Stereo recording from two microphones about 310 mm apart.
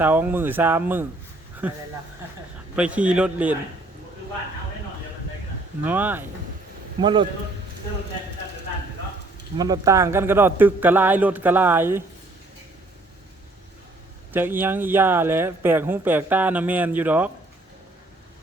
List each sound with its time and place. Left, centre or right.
0.0 s a man's voice: centre
5.8 s a man's voice: centre
9.6 s speech: centre
14.3 s speech: centre